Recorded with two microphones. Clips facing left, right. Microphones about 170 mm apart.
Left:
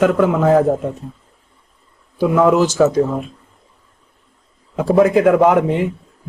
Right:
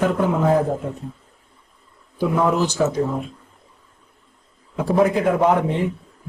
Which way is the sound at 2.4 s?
90° left.